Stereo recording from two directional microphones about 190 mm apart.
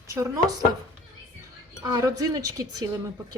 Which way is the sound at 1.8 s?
15° right (ahead or behind).